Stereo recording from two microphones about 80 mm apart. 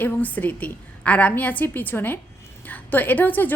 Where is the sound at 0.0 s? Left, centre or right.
Left.